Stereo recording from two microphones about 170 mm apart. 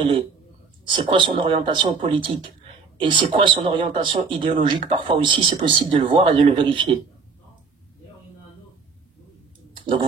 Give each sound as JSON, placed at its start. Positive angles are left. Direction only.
{"t": 0.8, "sound": "speech", "side_deg": -30}